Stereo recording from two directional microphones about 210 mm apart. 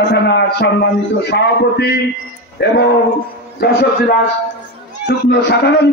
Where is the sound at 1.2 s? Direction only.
50° left (ahead or behind).